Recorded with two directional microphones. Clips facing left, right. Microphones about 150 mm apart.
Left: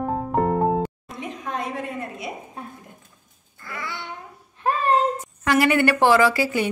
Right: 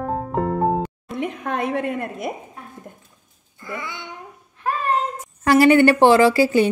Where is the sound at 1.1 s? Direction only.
60° right (ahead or behind).